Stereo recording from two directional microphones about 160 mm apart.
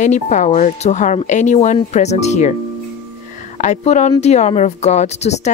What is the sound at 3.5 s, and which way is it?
Speech, 50° left (ahead or behind).